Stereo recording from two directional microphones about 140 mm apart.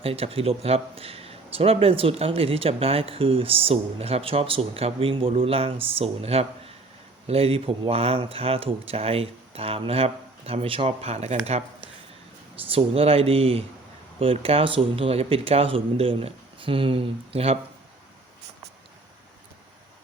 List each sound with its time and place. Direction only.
0.0 s a man's voice: 45° right (ahead or behind)